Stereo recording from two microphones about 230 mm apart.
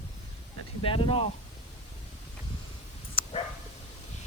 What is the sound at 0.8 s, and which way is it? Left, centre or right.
Speech, left.